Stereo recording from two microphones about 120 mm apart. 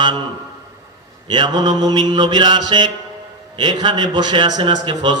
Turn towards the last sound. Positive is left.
turn(degrees=-35)  # may be behind; listen again after turning